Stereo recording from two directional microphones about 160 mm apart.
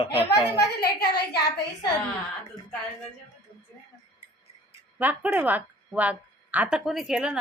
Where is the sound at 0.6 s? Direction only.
85° left.